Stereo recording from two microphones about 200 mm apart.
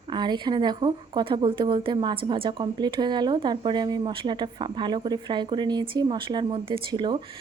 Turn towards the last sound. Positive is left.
turn(degrees=-25)  # may be behind; listen again after turning